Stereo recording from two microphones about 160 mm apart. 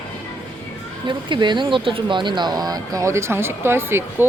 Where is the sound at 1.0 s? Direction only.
30° right (ahead or behind).